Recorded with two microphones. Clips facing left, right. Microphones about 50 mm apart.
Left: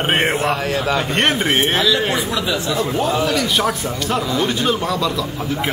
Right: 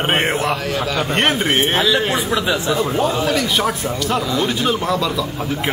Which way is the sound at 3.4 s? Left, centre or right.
Centre.